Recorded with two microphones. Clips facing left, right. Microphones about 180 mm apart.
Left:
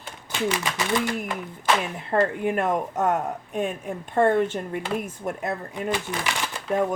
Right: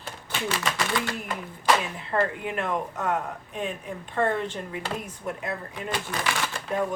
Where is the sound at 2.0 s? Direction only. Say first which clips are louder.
Left 5 dB; 50° left (ahead or behind).